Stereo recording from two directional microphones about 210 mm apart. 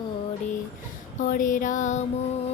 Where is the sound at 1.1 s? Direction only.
40° left (ahead or behind).